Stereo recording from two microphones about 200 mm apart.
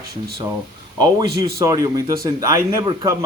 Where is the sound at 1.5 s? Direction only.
15° right (ahead or behind).